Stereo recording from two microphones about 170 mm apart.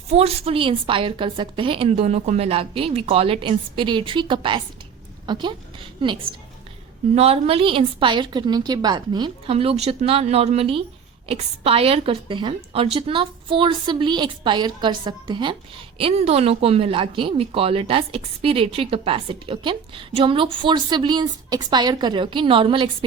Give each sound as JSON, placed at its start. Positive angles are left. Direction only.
{"t": 0.1, "sound": "a woman's voice", "side_deg": -35}
{"t": 7.2, "sound": "a woman's voice", "side_deg": -35}